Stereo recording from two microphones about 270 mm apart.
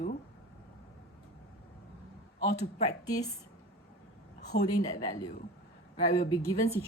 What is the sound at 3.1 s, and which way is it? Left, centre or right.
Speech, centre.